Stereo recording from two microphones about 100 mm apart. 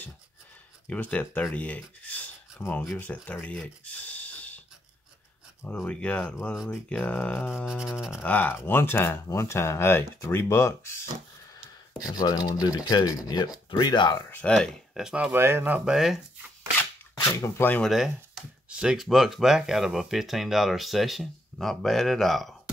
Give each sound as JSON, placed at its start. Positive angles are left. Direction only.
{"t": 0.8, "sound": "speech", "side_deg": 15}
{"t": 3.5, "sound": "a sound", "side_deg": 15}
{"t": 5.6, "sound": "speech", "side_deg": 10}
{"t": 7.5, "sound": "a sound", "side_deg": -5}
{"t": 8.2, "sound": "speech", "side_deg": 15}
{"t": 12.1, "sound": "speech", "side_deg": 40}
{"t": 14.3, "sound": "speech", "side_deg": 10}
{"t": 15.0, "sound": "speech", "side_deg": -5}
{"t": 15.3, "sound": "speech", "side_deg": -25}
{"t": 15.8, "sound": "speech", "side_deg": -5}
{"t": 17.3, "sound": "speech", "side_deg": 25}
{"t": 17.8, "sound": "speech", "side_deg": 0}